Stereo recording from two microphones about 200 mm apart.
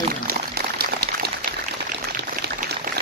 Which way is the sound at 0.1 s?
50° right (ahead or behind).